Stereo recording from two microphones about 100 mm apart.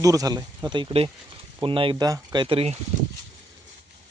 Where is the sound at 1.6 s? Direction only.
60° right (ahead or behind).